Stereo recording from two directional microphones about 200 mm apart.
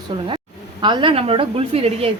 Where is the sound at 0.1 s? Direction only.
30° right (ahead or behind).